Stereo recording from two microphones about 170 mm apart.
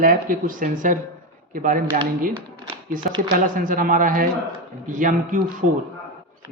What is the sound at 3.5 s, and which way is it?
Speech, 55° right (ahead or behind).